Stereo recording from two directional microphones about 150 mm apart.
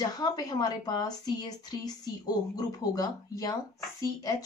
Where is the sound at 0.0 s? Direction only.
25° left (ahead or behind).